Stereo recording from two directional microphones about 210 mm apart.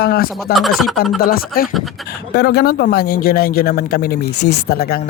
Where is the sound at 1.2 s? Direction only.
45° left (ahead or behind).